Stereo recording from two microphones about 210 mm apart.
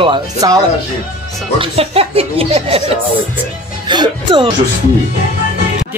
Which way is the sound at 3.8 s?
20° right (ahead or behind).